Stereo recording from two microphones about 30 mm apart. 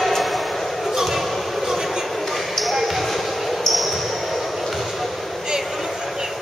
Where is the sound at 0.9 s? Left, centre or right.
Centre.